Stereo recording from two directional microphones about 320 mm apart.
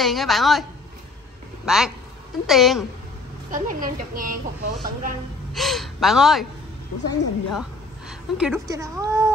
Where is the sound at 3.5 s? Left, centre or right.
Right.